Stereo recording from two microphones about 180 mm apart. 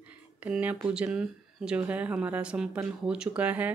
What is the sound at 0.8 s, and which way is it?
Speech, 5° right (ahead or behind).